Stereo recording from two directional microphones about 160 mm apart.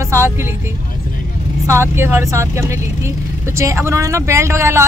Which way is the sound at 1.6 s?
15° right (ahead or behind).